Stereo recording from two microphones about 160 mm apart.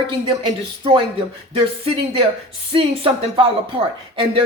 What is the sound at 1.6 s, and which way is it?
Speech, 35° right (ahead or behind).